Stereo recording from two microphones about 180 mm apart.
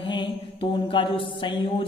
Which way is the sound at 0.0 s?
25° left (ahead or behind).